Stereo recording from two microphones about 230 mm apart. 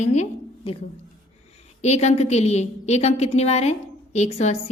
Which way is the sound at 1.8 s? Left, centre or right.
Left.